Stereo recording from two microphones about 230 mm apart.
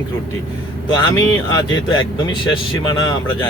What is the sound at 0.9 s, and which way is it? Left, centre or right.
Speech, centre.